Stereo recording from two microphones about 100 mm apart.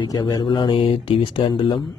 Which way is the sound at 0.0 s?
45° left (ahead or behind).